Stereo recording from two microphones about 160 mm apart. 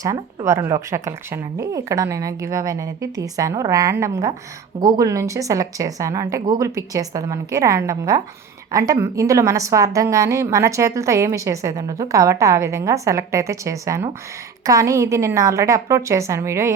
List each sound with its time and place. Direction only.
0.0 s a woman's voice: 20° right (ahead or behind)